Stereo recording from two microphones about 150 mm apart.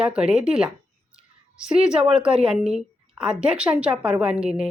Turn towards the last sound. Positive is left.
turn(degrees=-5)  # may be behind; listen again after turning